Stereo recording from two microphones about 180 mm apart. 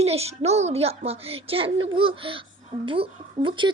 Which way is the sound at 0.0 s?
35° right (ahead or behind).